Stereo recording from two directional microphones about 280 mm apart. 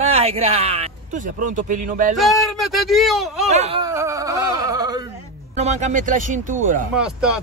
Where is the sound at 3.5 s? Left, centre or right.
Right.